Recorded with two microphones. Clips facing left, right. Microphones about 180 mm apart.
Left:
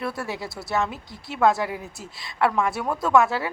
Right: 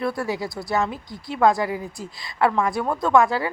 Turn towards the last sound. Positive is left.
turn(degrees=5)  # may be behind; listen again after turning